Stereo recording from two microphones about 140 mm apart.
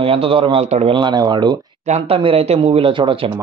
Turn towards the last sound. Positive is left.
turn(degrees=-35)  # may be behind; listen again after turning